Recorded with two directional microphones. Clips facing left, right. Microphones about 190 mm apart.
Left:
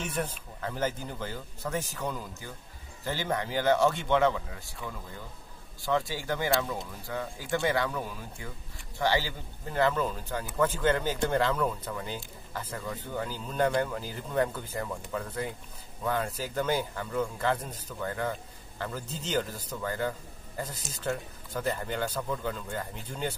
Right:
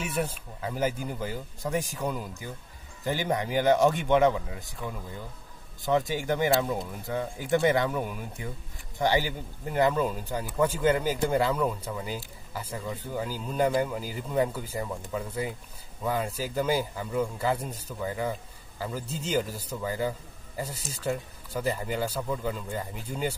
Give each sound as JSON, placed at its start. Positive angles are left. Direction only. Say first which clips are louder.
{"t": 0.0, "sound": "speech", "louder": "right 3 dB", "side_deg": -10}